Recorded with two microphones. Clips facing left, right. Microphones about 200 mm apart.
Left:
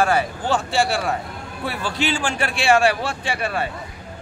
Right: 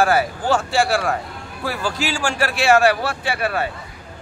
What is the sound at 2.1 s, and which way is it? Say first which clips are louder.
Speech: right 2 dB; 20° left (ahead or behind).